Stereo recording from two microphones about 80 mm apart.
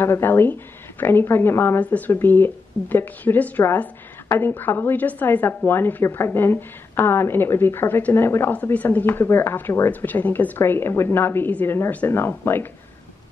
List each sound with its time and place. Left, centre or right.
0.0 s a woman's voice: left